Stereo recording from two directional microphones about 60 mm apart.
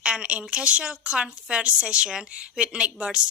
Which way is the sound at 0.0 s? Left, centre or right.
Centre.